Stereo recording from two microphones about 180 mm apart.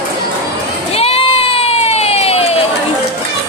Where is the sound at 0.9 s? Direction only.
35° left (ahead or behind).